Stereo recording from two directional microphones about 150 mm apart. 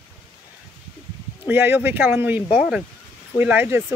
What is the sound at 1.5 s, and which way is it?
Speech, 15° right (ahead or behind).